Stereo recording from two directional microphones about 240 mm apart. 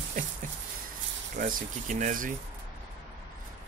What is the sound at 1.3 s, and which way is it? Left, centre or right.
Speech, right.